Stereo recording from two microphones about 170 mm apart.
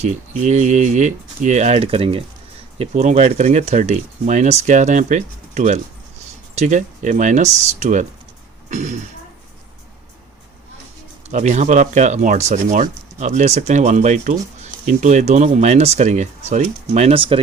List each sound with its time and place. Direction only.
0.0 s speech: 40° right (ahead or behind)
11.3 s speech: 45° right (ahead or behind)